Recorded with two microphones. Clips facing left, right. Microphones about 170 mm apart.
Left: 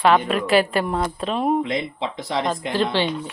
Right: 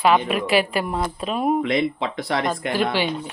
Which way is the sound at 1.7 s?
70° right (ahead or behind).